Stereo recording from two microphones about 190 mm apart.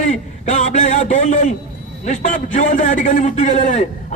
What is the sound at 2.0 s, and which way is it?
A man's voice, 40° left (ahead or behind).